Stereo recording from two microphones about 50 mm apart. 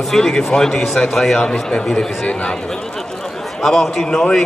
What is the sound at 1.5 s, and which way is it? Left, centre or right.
Speech, left.